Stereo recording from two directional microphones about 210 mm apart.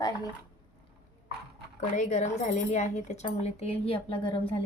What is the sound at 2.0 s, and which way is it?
Speech, 35° left (ahead or behind).